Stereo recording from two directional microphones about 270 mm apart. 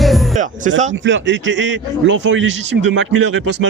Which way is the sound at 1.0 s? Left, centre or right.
Right.